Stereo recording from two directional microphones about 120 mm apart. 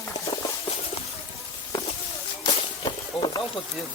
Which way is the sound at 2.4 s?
40° left (ahead or behind).